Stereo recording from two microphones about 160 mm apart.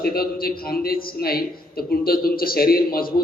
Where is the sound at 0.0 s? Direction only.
70° left (ahead or behind).